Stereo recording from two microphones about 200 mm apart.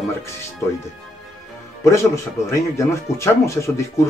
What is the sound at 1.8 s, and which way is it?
Speech, 15° left (ahead or behind).